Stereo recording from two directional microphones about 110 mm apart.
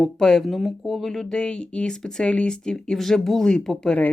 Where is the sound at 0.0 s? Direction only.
5° left (ahead or behind).